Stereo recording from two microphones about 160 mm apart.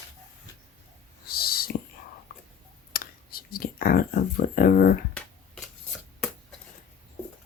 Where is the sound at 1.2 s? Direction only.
70° left (ahead or behind).